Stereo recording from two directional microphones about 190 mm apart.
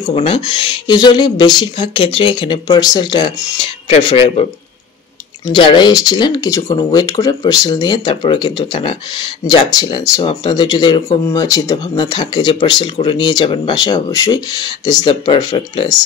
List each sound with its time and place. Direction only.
0.1 s speech: 30° left (ahead or behind)
5.5 s speech: 25° left (ahead or behind)